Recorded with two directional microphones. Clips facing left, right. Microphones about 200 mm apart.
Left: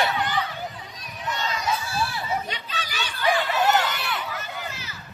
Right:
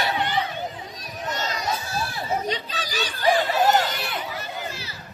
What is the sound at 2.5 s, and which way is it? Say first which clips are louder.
Children playing: right 5 dB; 35° right (ahead or behind).